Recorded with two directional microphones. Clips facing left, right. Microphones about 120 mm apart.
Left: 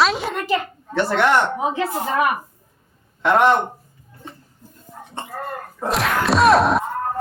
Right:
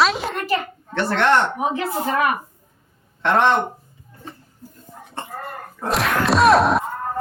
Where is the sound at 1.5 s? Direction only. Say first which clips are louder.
Left 1 dB; 25° left (ahead or behind).